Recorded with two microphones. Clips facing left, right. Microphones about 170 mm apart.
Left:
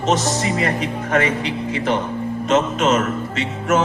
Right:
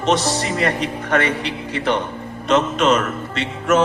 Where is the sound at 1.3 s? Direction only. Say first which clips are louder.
Left 2 dB; 70° right (ahead or behind).